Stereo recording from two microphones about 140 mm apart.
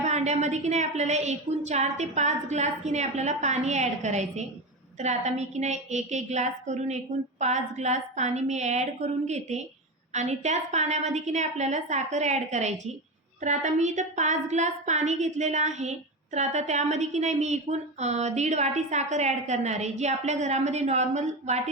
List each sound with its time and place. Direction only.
0.0 s a woman's voice: 55° right (ahead or behind)